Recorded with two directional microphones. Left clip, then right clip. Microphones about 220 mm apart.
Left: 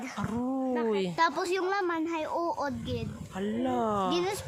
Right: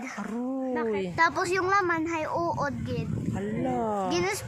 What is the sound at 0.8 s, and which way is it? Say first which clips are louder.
Speech: right 3 dB; 5° left (ahead or behind).